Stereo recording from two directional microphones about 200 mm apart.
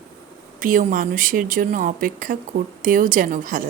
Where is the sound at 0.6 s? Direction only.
45° right (ahead or behind).